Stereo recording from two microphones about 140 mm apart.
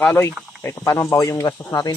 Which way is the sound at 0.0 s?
15° left (ahead or behind).